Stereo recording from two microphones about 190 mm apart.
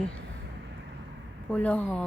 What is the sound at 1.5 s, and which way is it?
Speech, 5° left (ahead or behind).